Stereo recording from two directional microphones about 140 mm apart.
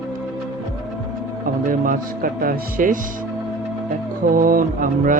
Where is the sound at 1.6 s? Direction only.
85° right.